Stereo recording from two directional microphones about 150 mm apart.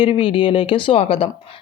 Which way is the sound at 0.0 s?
35° left (ahead or behind).